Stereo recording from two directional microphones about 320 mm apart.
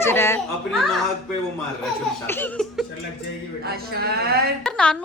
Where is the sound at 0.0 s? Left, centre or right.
Centre.